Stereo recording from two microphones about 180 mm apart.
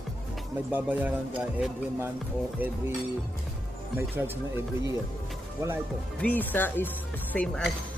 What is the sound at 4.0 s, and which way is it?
Speech, 15° right (ahead or behind).